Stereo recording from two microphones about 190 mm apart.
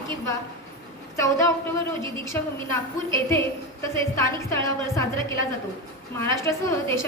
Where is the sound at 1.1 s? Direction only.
15° left (ahead or behind).